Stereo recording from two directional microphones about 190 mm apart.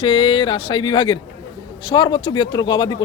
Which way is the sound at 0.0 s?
25° left (ahead or behind).